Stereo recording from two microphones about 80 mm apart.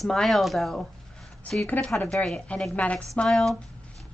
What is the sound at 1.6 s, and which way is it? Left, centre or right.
Speech, left.